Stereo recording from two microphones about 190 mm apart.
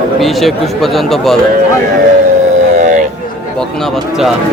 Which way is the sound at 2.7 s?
40° right (ahead or behind).